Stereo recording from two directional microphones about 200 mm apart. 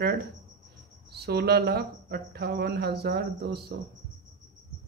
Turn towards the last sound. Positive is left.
turn(degrees=-50)  # may be behind; listen again after turning